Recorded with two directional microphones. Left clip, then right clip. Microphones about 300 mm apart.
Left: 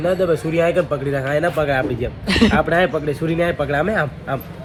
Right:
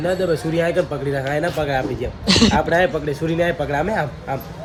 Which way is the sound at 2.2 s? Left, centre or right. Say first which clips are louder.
Right 1 dB; centre.